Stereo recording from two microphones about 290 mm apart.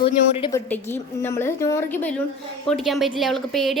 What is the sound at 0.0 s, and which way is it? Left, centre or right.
A woman's voice, centre.